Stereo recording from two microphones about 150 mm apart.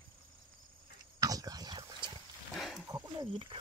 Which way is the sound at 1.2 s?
25° right (ahead or behind).